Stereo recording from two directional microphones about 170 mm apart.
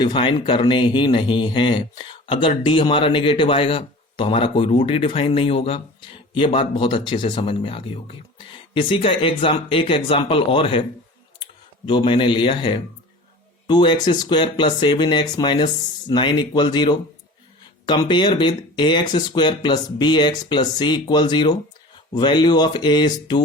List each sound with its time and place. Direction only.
0.0 s speech: 30° left (ahead or behind)
11.9 s speech: 30° left (ahead or behind)